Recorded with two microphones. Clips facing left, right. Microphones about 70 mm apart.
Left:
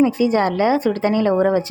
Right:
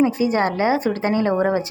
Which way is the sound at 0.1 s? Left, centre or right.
Right.